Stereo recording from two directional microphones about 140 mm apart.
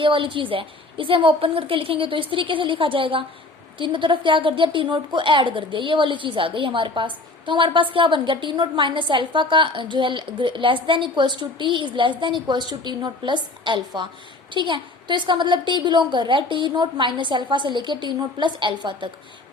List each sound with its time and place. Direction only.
0.0 s a woman's voice: 35° right (ahead or behind)